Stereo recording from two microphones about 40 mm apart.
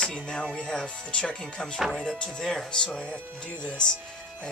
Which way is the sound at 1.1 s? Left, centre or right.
Left.